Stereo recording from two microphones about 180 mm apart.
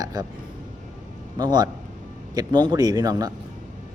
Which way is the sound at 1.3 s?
25° right (ahead or behind).